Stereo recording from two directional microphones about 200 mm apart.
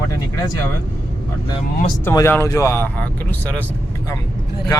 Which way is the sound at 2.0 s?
10° left (ahead or behind).